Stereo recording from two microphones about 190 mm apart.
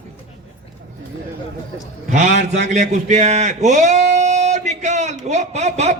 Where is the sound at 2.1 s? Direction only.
40° right (ahead or behind).